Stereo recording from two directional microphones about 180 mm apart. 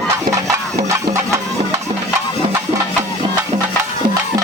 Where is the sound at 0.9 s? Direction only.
15° right (ahead or behind).